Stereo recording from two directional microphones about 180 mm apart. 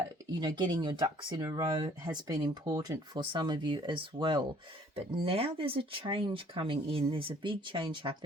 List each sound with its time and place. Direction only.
0.3 s speech: 25° right (ahead or behind)